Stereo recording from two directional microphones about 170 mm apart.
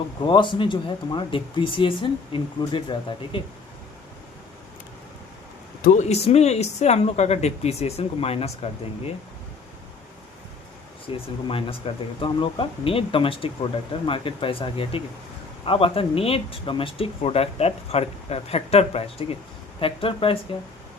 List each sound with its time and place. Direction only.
0.3 s speech: 30° left (ahead or behind)
5.8 s speech: 45° left (ahead or behind)
11.1 s speech: 35° left (ahead or behind)